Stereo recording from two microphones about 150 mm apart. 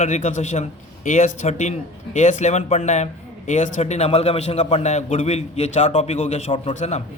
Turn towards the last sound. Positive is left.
turn(degrees=50)  # may be behind; listen again after turning